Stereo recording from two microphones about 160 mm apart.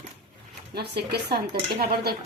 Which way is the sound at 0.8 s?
85° right.